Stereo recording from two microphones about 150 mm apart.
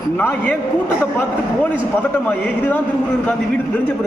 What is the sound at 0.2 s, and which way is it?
Speech, 10° left (ahead or behind).